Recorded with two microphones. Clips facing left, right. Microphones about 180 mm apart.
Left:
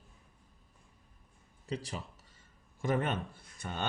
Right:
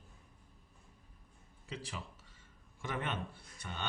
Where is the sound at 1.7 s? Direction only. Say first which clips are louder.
Left 6 dB; 40° left (ahead or behind).